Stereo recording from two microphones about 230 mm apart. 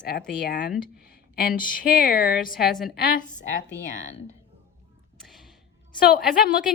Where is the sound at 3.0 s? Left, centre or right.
Left.